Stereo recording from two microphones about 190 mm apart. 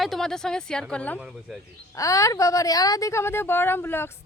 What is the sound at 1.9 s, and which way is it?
A woman's voice, 15° left (ahead or behind).